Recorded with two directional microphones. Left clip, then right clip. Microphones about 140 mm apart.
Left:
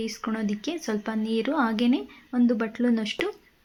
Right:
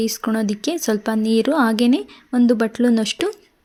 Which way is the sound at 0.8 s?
50° right (ahead or behind).